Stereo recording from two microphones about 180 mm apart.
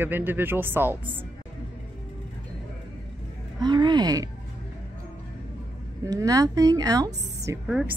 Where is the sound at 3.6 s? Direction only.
25° right (ahead or behind).